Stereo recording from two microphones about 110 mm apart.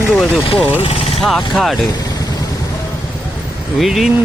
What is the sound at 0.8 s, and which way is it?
Speech, 65° left (ahead or behind).